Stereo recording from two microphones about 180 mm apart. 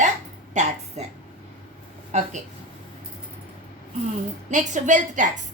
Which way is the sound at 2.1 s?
40° right (ahead or behind).